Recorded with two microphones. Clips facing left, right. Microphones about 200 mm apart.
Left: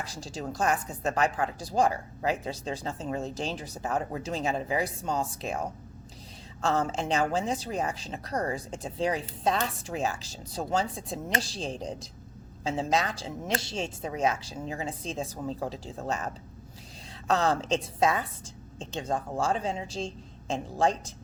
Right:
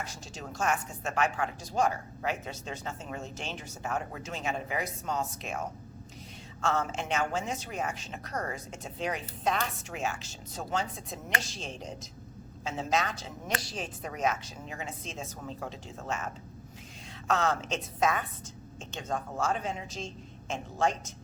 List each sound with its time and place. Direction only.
0.0 s a woman's voice: 35° left (ahead or behind)